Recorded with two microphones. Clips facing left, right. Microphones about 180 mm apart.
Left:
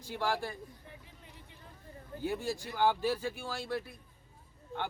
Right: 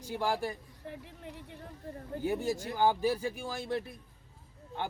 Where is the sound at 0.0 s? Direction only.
15° right (ahead or behind).